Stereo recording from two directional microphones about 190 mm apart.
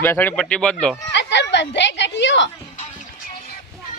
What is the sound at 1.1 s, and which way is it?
A woman's voice, 65° left (ahead or behind).